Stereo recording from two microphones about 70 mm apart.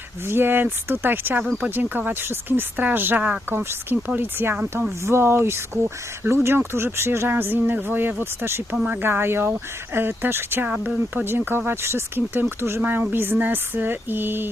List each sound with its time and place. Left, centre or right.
0.3 s speech: right
3.5 s speech: right
5.0 s speech: right
10.7 s speech: right